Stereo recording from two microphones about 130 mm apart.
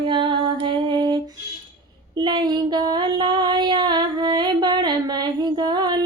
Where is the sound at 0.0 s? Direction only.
40° right (ahead or behind).